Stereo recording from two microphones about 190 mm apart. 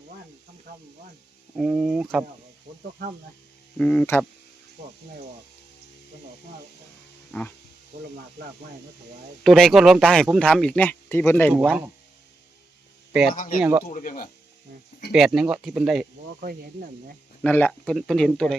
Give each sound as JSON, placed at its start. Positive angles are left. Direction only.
{"t": 1.5, "sound": "speech", "side_deg": -5}
{"t": 3.8, "sound": "speech", "side_deg": 5}
{"t": 7.3, "sound": "a sound", "side_deg": 5}
{"t": 7.9, "sound": "speech", "side_deg": -45}
{"t": 9.4, "sound": "speech", "side_deg": 0}
{"t": 11.5, "sound": "speech", "side_deg": -5}
{"t": 13.3, "sound": "speech", "side_deg": 45}
{"t": 13.6, "sound": "speech", "side_deg": -10}
{"t": 13.8, "sound": "speech", "side_deg": 45}
{"t": 15.1, "sound": "speech", "side_deg": 0}
{"t": 17.4, "sound": "speech", "side_deg": 10}